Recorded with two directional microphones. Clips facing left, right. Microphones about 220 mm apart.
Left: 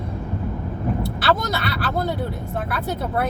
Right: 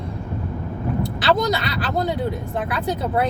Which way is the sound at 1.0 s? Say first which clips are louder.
Right 4 dB; 20° right (ahead or behind).